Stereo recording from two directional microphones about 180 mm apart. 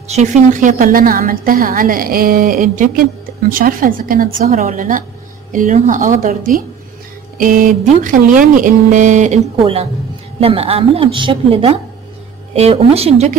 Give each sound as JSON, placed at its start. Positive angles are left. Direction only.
{"t": 0.1, "sound": "a woman's voice", "side_deg": -40}
{"t": 4.3, "sound": "a woman's voice", "side_deg": -40}
{"t": 4.6, "sound": "a woman's voice", "side_deg": -50}